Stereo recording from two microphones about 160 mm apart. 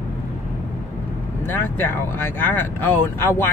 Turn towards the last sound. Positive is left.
turn(degrees=15)  # may be behind; listen again after turning